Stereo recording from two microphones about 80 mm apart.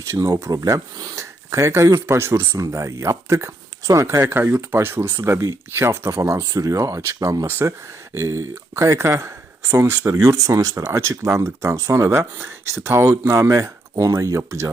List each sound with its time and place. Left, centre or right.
0.0 s speech: right
7.4 s speech: right